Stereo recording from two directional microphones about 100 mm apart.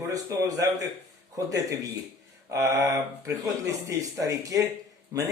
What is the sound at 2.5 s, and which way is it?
Speech, 30° right (ahead or behind).